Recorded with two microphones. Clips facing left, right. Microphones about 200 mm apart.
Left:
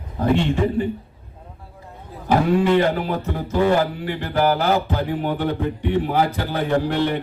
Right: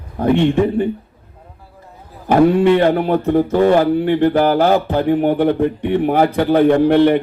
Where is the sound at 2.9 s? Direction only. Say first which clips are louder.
Right 9 dB; 55° right (ahead or behind).